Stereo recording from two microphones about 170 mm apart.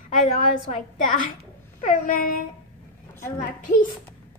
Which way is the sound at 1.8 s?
50° left (ahead or behind).